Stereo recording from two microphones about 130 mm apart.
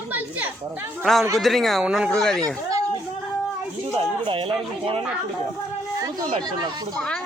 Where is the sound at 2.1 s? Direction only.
5° left (ahead or behind).